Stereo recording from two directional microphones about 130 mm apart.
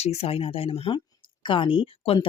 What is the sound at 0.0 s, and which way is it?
Speech, 55° left (ahead or behind).